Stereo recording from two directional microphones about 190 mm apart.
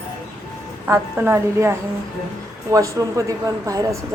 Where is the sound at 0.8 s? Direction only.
10° right (ahead or behind).